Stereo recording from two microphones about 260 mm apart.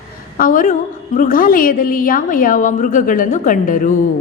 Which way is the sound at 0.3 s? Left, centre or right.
Left.